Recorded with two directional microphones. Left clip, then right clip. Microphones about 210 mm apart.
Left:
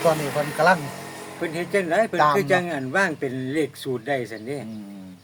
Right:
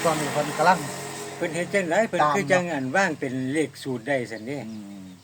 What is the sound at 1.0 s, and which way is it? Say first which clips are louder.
Music: right 2 dB; 40° right (ahead or behind).